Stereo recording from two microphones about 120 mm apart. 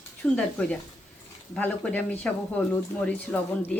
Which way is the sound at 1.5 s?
10° left (ahead or behind).